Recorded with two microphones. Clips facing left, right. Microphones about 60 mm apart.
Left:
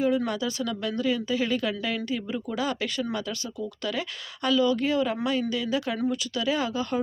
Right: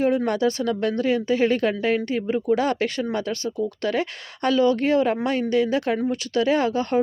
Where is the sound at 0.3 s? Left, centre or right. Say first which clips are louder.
Right 7 dB; right.